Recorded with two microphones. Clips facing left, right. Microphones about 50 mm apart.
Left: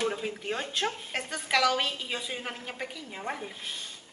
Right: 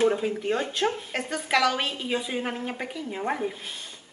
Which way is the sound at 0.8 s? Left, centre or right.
Centre.